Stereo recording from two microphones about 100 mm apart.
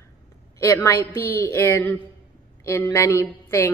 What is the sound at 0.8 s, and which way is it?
A woman's voice, 25° left (ahead or behind).